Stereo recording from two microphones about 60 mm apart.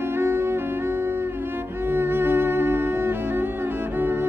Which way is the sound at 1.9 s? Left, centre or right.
Right.